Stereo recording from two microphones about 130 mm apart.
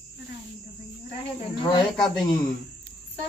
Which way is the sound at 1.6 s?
40° left (ahead or behind).